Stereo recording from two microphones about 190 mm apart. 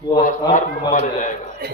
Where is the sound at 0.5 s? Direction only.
40° left (ahead or behind).